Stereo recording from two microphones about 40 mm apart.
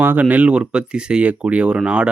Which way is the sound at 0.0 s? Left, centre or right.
Right.